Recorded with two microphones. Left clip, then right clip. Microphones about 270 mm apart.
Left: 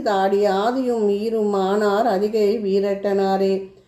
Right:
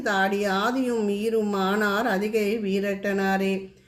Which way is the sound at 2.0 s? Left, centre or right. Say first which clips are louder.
Left 6 dB; right.